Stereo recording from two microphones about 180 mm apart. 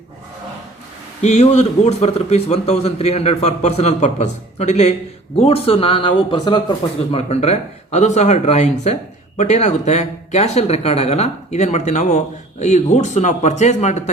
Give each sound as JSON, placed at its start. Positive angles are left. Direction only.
{"t": 1.2, "sound": "speech", "side_deg": 40}